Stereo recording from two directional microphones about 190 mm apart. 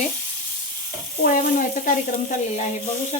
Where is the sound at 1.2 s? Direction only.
45° left (ahead or behind).